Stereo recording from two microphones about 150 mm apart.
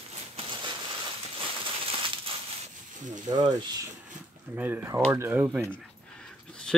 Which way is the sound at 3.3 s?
25° right (ahead or behind).